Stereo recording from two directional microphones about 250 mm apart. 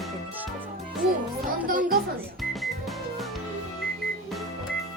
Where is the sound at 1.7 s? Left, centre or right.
Right.